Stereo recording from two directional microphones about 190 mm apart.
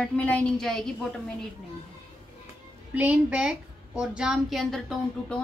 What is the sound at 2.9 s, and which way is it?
A woman's voice, 5° right (ahead or behind).